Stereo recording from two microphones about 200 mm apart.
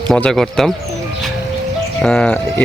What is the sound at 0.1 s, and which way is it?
Speech, centre (ahead or behind).